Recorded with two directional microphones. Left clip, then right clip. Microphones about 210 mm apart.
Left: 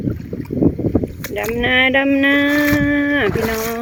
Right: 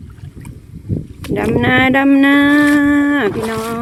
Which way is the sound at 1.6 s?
25° right (ahead or behind).